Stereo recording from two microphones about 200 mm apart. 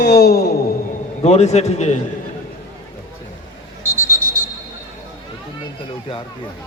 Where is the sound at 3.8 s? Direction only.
10° right (ahead or behind).